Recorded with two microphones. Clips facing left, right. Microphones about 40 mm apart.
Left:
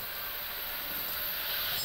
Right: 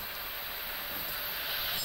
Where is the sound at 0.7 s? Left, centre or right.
Centre.